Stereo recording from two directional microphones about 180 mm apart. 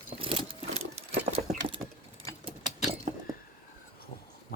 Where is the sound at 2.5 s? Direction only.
30° right (ahead or behind).